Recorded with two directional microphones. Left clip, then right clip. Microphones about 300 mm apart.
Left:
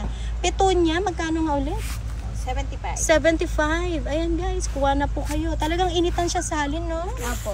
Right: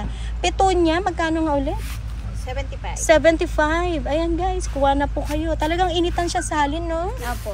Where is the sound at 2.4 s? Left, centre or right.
Left.